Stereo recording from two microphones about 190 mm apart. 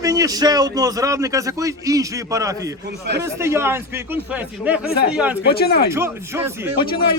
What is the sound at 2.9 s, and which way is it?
Speech, 60° right (ahead or behind).